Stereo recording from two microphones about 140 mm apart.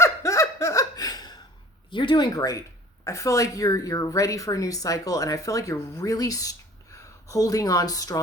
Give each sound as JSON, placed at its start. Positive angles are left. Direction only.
{"t": 0.0, "sound": "laughter", "side_deg": 20}
{"t": 1.9, "sound": "speech", "side_deg": 35}